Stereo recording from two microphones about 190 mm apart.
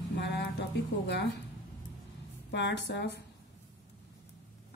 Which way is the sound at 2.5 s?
65° left (ahead or behind).